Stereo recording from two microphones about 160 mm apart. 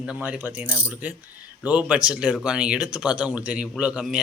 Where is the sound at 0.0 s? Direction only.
5° right (ahead or behind).